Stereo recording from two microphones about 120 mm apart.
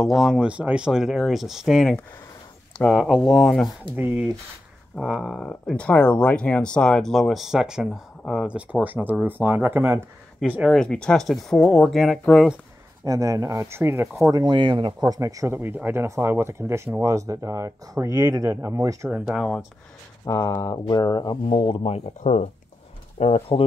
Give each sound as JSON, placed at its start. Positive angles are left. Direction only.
{"t": 0.0, "sound": "speech", "side_deg": 0}
{"t": 3.9, "sound": "speech", "side_deg": -15}
{"t": 5.0, "sound": "speech", "side_deg": -5}
{"t": 10.7, "sound": "speech", "side_deg": 5}
{"t": 13.0, "sound": "speech", "side_deg": -30}
{"t": 14.2, "sound": "speech", "side_deg": -35}
{"t": 15.0, "sound": "speech", "side_deg": -30}
{"t": 15.5, "sound": "speech", "side_deg": -15}
{"t": 19.0, "sound": "speech", "side_deg": -10}
{"t": 20.2, "sound": "speech", "side_deg": 25}
{"t": 21.5, "sound": "speech", "side_deg": 50}
{"t": 23.1, "sound": "speech", "side_deg": 60}